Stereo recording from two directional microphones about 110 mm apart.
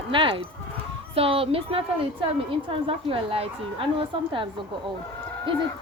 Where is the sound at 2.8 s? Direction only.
55° right (ahead or behind).